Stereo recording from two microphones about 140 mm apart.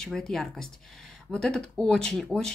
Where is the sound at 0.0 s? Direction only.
5° left (ahead or behind).